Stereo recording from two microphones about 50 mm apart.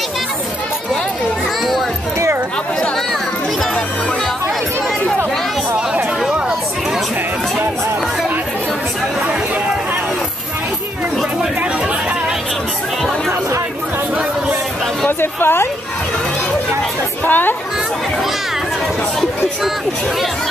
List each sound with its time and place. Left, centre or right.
15.0 s a woman's voice: left
17.2 s speech: left